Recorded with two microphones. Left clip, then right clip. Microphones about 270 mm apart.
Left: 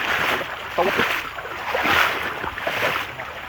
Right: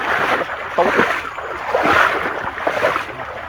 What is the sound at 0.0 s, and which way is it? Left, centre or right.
Boat, right.